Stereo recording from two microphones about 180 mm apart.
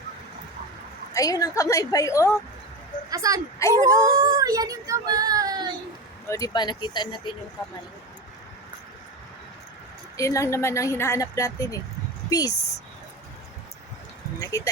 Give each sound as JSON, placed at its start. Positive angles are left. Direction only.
{"t": 1.1, "sound": "speech", "side_deg": 20}
{"t": 3.1, "sound": "speech", "side_deg": -20}
{"t": 6.2, "sound": "speech", "side_deg": 15}
{"t": 10.2, "sound": "speech", "side_deg": 15}
{"t": 14.3, "sound": "speech", "side_deg": 20}